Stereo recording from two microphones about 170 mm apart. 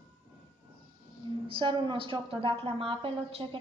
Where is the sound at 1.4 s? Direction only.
30° right (ahead or behind).